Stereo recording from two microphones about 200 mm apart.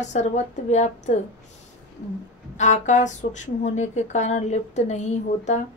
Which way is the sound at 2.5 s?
35° left (ahead or behind).